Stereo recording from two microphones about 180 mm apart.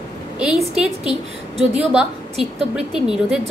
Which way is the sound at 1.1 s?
35° right (ahead or behind).